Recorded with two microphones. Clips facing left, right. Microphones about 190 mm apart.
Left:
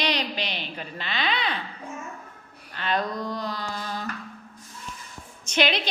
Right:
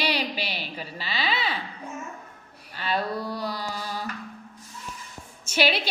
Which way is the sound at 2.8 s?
10° right (ahead or behind).